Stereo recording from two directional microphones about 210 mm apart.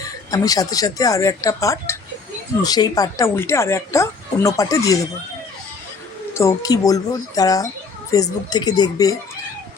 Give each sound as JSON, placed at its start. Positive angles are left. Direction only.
{"t": 0.0, "sound": "speech", "side_deg": 15}
{"t": 6.3, "sound": "speech", "side_deg": 15}